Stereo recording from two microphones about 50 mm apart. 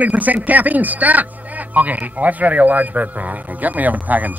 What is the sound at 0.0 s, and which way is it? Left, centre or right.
Speech, right.